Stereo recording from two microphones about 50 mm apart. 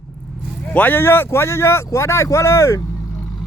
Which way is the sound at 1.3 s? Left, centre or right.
Left.